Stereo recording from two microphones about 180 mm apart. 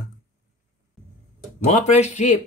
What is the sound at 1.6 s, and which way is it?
Speech, 40° left (ahead or behind).